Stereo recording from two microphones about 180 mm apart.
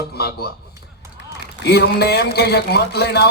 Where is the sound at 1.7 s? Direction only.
65° left (ahead or behind).